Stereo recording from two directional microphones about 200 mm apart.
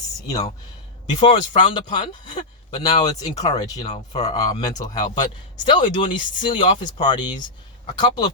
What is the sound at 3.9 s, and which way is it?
Speech, 35° left (ahead or behind).